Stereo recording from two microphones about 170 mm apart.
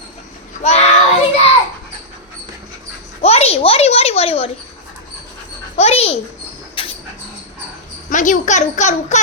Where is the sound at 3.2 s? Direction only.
40° left (ahead or behind).